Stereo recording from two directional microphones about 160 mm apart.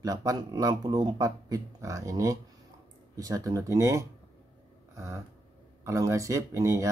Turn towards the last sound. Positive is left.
turn(degrees=-20)  # may be behind; listen again after turning